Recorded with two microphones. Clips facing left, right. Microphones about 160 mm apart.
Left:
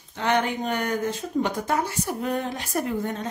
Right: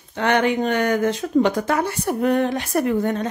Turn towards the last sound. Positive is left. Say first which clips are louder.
# right 7 dB
turn(degrees=-70)  # may be behind; listen again after turning